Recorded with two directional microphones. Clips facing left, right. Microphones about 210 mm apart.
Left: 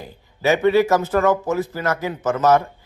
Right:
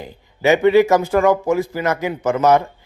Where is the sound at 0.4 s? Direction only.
15° right (ahead or behind).